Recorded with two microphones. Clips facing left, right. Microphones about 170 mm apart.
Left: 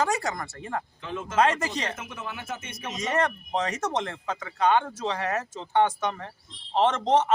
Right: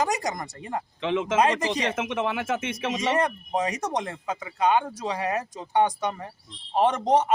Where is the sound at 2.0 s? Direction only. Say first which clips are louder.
Right 11 dB; 90° right.